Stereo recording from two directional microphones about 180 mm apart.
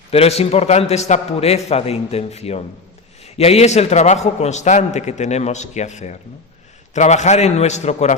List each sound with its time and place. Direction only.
0.1 s a man's voice: 35° left (ahead or behind)